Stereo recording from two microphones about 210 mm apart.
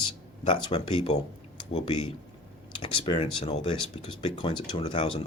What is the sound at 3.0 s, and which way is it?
Speech, 25° left (ahead or behind).